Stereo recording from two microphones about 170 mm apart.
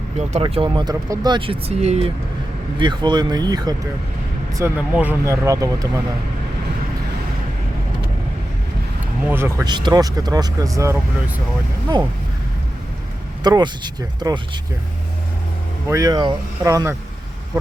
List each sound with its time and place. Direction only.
0.3 s speech: 30° right (ahead or behind)
2.7 s speech: 25° right (ahead or behind)
4.5 s speech: 10° right (ahead or behind)
9.2 s speech: 15° right (ahead or behind)
9.6 s speech: 25° right (ahead or behind)
13.4 s speech: 25° right (ahead or behind)
15.9 s speech: 20° right (ahead or behind)